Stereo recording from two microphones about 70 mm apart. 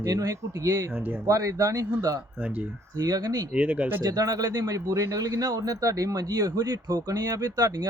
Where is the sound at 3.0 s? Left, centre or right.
Right.